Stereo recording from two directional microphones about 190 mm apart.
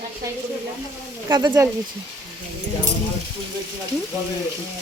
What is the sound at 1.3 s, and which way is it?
Speech, 20° right (ahead or behind).